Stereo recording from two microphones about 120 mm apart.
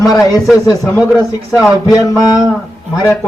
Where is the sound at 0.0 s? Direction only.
30° left (ahead or behind).